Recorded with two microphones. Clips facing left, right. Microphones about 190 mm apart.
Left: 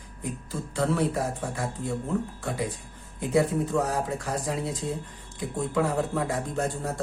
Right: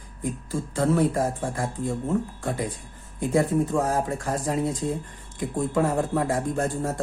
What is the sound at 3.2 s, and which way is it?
Speech, 50° right (ahead or behind).